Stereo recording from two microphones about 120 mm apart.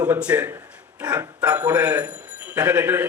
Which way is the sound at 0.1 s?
10° right (ahead or behind).